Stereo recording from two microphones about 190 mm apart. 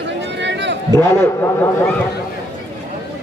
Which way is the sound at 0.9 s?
10° left (ahead or behind).